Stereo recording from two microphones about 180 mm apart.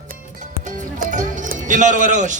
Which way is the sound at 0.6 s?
45° right (ahead or behind).